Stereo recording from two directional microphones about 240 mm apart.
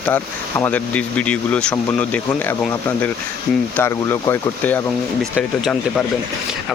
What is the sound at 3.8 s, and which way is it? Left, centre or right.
Speech, centre.